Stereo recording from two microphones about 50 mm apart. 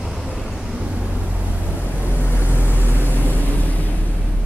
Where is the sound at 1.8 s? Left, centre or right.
Left.